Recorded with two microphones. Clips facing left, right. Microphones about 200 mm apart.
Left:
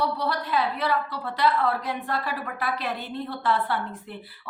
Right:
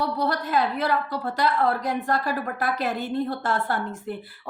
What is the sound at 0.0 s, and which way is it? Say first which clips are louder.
A woman's voice: right 2 dB; 45° right (ahead or behind).